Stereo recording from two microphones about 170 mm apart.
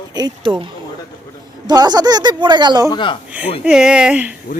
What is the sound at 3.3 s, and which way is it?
Speech, 10° right (ahead or behind).